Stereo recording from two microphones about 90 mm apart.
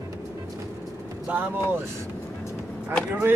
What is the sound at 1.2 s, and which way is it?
Speech, 20° right (ahead or behind).